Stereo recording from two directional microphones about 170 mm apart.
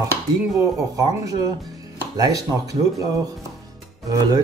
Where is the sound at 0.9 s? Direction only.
20° right (ahead or behind).